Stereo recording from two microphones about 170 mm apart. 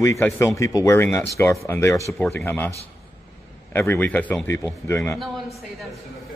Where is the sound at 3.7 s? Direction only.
15° left (ahead or behind).